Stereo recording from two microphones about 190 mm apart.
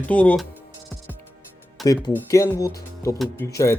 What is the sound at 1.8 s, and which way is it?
Speech, centre (ahead or behind).